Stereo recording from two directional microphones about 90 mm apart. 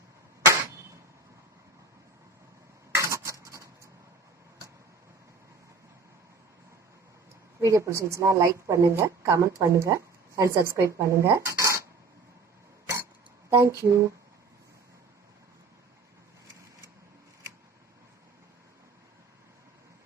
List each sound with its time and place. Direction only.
3.0 s cutlery: 35° right (ahead or behind)
7.6 s a woman's voice: 35° right (ahead or behind)
13.5 s a woman's voice: 35° right (ahead or behind)